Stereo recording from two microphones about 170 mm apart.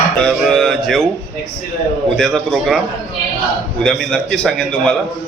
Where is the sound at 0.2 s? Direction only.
5° left (ahead or behind).